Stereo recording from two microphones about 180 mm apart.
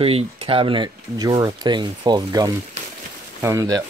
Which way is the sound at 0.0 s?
30° right (ahead or behind).